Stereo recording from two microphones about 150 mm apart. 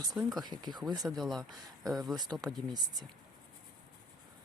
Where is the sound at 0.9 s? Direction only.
25° right (ahead or behind).